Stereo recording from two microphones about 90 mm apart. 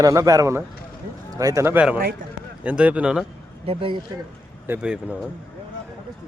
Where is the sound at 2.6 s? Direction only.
15° right (ahead or behind).